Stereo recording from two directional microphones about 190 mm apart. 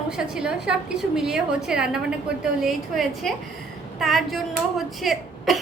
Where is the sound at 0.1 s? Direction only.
5° right (ahead or behind).